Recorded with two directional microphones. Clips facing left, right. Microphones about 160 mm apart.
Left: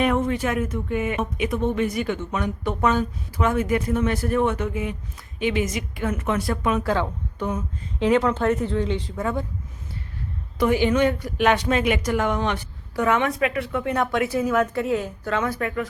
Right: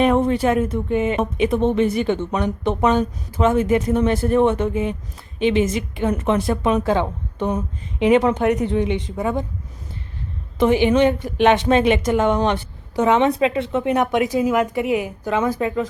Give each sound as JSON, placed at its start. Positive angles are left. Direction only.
{"t": 0.0, "sound": "a woman's voice", "side_deg": -30}
{"t": 10.6, "sound": "a woman's voice", "side_deg": -20}